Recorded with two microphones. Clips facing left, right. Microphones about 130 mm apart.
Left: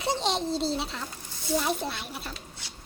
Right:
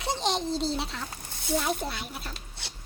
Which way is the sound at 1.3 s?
60° right (ahead or behind).